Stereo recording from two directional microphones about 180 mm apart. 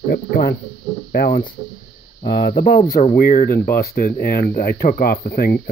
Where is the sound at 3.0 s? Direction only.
45° left (ahead or behind).